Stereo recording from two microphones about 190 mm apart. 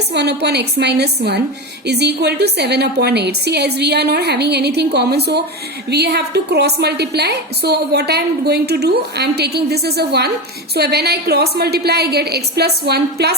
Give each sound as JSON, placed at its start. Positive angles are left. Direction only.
{"t": 0.1, "sound": "a woman's voice", "side_deg": -60}